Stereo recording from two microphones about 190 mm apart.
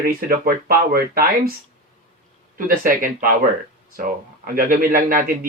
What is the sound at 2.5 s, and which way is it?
Speech, 45° right (ahead or behind).